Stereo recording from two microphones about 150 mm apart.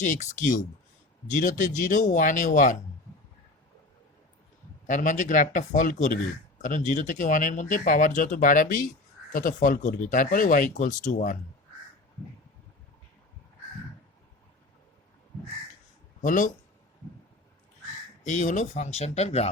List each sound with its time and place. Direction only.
0.0 s speech: 55° left (ahead or behind)
4.9 s speech: 60° left (ahead or behind)
16.2 s speech: 60° left (ahead or behind)
18.3 s speech: 55° left (ahead or behind)